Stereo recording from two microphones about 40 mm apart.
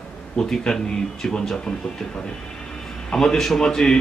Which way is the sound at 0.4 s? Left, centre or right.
Centre.